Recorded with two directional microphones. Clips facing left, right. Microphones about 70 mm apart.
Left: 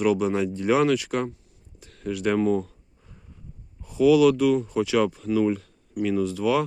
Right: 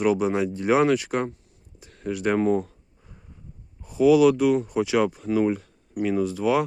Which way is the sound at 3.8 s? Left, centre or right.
Right.